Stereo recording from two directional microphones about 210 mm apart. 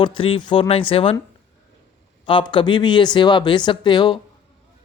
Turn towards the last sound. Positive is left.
turn(degrees=20)  # may be behind; listen again after turning